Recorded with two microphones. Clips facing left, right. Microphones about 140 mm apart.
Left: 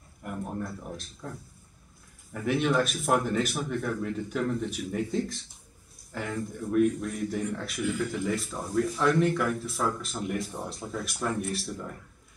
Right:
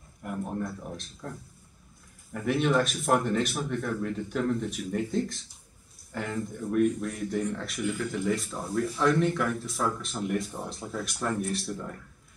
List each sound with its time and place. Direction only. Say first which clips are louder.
0.2 s a man's voice: right 2 dB; centre (ahead or behind)
2.3 s a man's voice: even; centre (ahead or behind)